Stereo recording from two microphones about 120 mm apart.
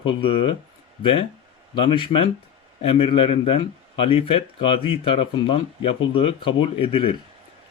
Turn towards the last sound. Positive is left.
turn(degrees=50)  # may be behind; listen again after turning